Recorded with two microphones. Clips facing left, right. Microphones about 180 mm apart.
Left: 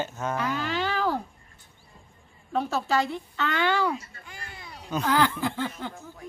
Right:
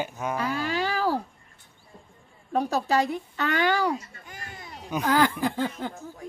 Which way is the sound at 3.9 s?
45° right (ahead or behind).